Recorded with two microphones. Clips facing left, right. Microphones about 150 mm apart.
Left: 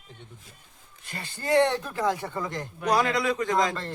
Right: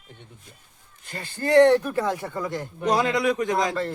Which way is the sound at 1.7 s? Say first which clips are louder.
Right 3 dB; 15° right (ahead or behind).